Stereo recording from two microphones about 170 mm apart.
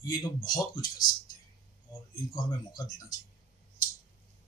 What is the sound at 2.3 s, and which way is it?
Speech, 25° left (ahead or behind).